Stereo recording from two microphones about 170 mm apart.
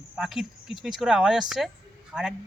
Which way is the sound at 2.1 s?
5° right (ahead or behind).